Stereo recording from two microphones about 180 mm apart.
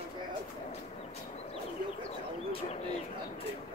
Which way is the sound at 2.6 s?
35° left (ahead or behind).